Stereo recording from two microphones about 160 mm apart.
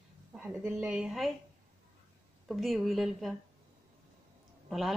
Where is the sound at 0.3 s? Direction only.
5° right (ahead or behind).